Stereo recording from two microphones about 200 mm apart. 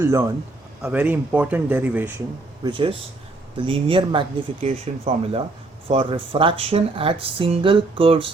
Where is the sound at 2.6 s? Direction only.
25° right (ahead or behind).